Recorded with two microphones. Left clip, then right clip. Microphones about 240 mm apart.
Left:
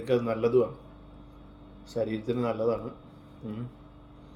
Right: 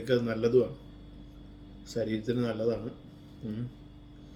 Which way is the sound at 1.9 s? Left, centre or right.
Centre.